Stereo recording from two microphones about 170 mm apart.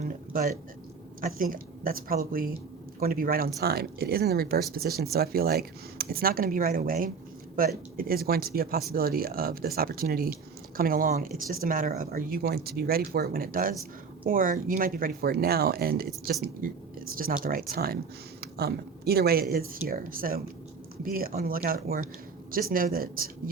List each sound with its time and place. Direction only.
1.2 s speech: 55° right (ahead or behind)